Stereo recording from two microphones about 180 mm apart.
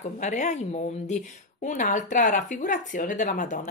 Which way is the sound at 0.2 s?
40° left (ahead or behind).